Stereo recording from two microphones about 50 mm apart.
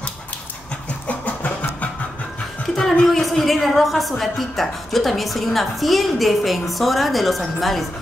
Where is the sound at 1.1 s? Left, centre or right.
Left.